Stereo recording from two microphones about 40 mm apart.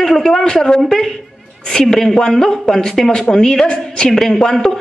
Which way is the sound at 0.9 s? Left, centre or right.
Centre.